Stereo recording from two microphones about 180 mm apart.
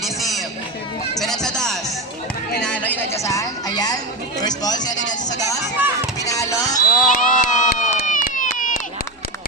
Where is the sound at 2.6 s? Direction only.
10° left (ahead or behind).